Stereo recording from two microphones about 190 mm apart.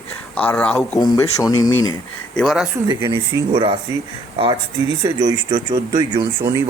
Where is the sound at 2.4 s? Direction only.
Centre (ahead or behind).